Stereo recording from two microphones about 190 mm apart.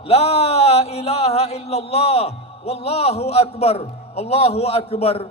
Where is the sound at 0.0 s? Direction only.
30° left (ahead or behind).